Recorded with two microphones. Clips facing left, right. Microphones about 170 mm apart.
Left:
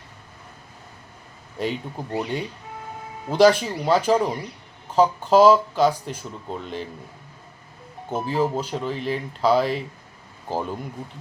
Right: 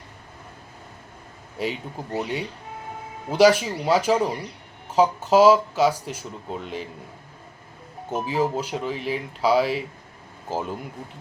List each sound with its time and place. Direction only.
1.5 s speech: 5° right (ahead or behind)
8.1 s speech: 10° right (ahead or behind)